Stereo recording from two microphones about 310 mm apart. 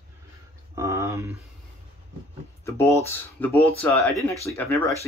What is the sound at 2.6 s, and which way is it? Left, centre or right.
Speech, centre.